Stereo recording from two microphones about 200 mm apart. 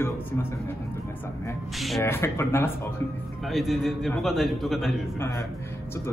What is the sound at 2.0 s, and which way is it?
Speech, 10° left (ahead or behind).